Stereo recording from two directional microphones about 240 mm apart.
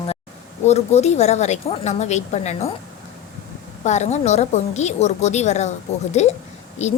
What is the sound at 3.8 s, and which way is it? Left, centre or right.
A woman's voice, left.